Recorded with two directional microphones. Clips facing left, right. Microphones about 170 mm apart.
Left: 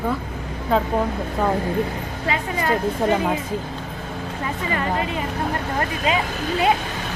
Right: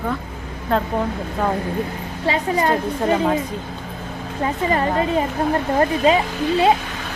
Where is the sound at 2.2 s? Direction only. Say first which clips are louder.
Right 5 dB; 35° right (ahead or behind).